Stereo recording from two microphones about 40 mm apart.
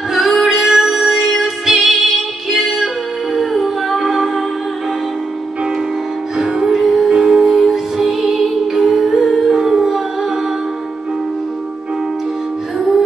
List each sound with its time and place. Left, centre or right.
0.1 s music: centre
6.3 s music: centre
7.5 s music: centre